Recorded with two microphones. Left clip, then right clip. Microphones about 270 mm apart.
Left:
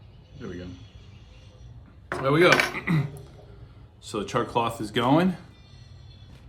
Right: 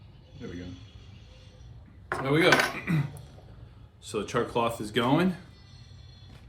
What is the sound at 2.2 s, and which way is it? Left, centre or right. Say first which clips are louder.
Speech: left 5 dB; centre.